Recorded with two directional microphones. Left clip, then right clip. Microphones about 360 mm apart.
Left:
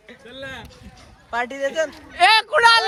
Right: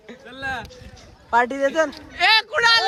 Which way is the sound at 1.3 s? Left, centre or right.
Centre.